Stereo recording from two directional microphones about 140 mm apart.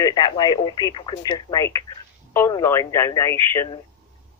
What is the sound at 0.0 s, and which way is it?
Speech, 30° left (ahead or behind).